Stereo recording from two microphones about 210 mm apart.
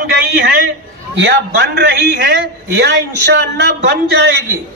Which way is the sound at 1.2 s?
50° right (ahead or behind).